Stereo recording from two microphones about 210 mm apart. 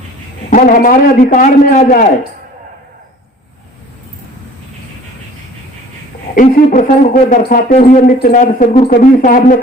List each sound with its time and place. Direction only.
0.5 s speech: 35° left (ahead or behind)
6.3 s speech: 40° left (ahead or behind)